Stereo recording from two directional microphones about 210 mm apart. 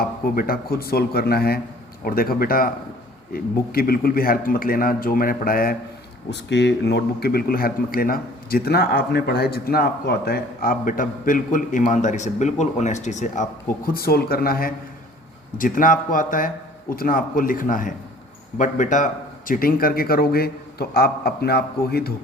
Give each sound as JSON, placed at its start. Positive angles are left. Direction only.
{"t": 0.0, "sound": "speech", "side_deg": 45}
{"t": 6.3, "sound": "speech", "side_deg": 55}